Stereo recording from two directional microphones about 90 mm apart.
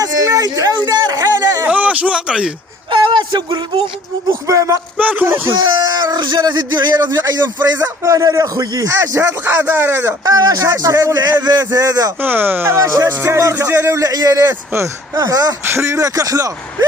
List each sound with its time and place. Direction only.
0.0 s a sound: 40° right (ahead or behind)
1.6 s a sound: 15° right (ahead or behind)
2.9 s speech: 60° right (ahead or behind)
4.3 s a man's voice: 40° right (ahead or behind)
4.9 s speech: 20° right (ahead or behind)
5.5 s a man's voice: 55° right (ahead or behind)
9.0 s speech: 25° right (ahead or behind)
10.2 s a man's voice: 45° right (ahead or behind)
12.2 s a man's voice: 20° right (ahead or behind); by 15.5 s 40° right (ahead or behind)
15.6 s a man's voice: 30° right (ahead or behind)